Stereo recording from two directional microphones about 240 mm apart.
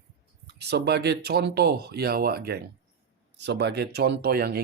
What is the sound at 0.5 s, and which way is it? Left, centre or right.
Speech, right.